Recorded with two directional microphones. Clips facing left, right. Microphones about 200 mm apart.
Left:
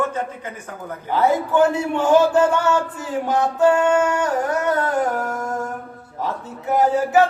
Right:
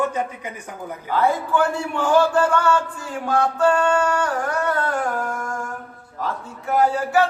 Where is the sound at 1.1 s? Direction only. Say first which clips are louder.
Left 2 dB; 20° left (ahead or behind).